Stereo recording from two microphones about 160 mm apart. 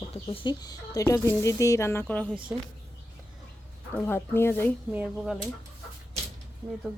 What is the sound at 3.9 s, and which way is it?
Speech, 15° left (ahead or behind).